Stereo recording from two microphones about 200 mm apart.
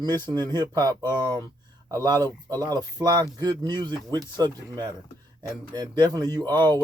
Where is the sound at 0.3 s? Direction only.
20° right (ahead or behind).